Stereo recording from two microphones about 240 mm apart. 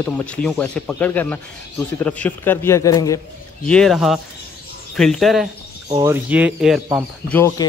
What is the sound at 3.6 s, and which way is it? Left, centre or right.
Speech, centre.